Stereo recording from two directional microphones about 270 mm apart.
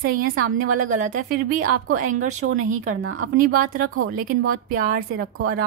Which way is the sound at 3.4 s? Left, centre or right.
Right.